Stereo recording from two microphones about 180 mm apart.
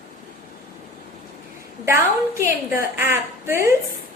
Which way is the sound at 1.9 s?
15° right (ahead or behind).